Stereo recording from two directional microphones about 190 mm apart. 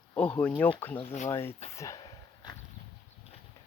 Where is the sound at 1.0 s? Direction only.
35° left (ahead or behind).